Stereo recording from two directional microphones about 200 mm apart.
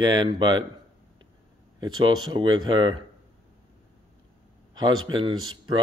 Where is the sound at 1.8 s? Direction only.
20° right (ahead or behind).